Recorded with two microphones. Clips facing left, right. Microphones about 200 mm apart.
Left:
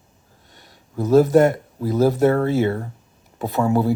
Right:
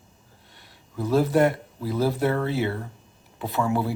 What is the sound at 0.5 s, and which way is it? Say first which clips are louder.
Speech: left 5 dB; 45° left (ahead or behind).